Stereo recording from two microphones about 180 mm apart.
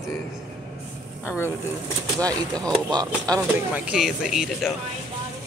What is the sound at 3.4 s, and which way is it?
Speech, 10° right (ahead or behind).